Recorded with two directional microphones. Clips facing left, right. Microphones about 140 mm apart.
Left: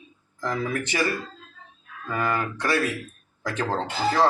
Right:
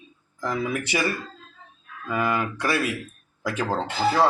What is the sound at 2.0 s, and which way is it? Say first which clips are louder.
Speech: right 1 dB; 10° right (ahead or behind).